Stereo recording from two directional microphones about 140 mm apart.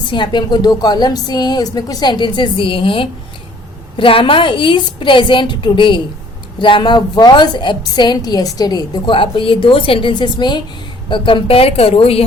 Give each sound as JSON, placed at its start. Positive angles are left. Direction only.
{"t": 0.1, "sound": "a woman's voice", "side_deg": 35}